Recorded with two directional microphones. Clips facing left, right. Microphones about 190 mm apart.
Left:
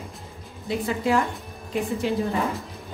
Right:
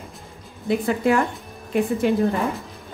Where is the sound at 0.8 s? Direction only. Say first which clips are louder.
Right 3 dB; 55° right (ahead or behind).